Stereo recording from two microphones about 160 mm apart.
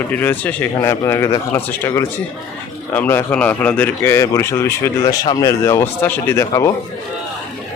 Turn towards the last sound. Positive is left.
turn(degrees=20)  # may be behind; listen again after turning